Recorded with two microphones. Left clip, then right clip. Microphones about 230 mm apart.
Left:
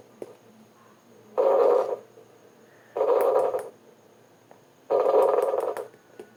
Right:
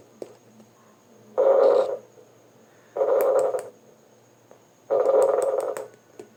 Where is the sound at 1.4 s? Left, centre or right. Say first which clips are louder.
Right 3 dB; left.